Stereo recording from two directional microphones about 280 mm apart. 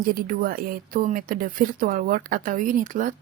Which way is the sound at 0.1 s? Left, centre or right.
Right.